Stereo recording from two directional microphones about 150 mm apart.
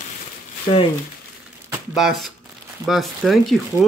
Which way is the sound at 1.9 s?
Centre (ahead or behind).